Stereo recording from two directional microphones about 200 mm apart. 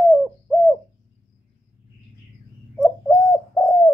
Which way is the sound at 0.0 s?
Centre (ahead or behind).